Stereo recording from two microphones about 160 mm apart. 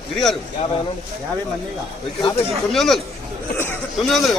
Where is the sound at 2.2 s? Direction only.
15° left (ahead or behind).